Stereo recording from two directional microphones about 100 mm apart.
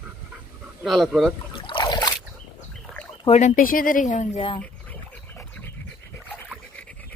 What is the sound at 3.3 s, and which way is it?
Speech, 65° left (ahead or behind).